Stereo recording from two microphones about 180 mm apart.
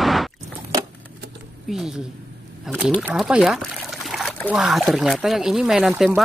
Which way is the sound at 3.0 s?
5° right (ahead or behind).